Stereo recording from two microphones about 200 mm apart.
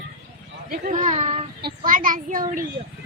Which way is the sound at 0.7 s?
40° right (ahead or behind).